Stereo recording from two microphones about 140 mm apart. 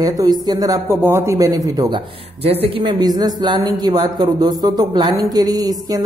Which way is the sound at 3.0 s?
30° right (ahead or behind).